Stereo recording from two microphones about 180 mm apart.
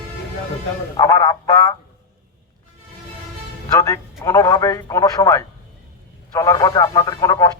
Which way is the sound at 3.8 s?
15° left (ahead or behind).